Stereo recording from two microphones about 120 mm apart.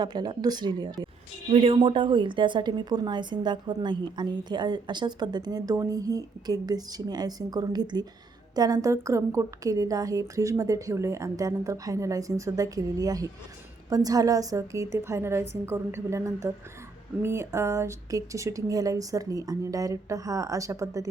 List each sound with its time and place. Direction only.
0.0 s a woman's voice: 35° right (ahead or behind)
1.5 s a woman's voice: 55° right (ahead or behind); by 21.1 s 25° right (ahead or behind)